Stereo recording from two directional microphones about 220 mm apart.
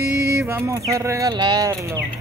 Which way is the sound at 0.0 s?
45° right (ahead or behind).